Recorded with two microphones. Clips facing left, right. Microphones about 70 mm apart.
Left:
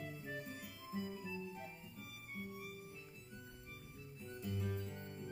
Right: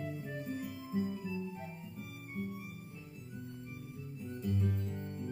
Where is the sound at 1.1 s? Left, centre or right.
Centre.